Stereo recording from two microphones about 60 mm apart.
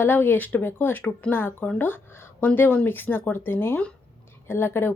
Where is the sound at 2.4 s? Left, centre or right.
Left.